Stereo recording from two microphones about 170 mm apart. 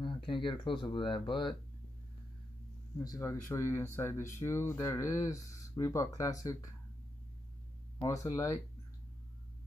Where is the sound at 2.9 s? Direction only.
20° left (ahead or behind).